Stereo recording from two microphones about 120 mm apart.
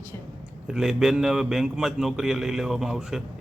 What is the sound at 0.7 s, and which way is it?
A man's voice, 5° right (ahead or behind).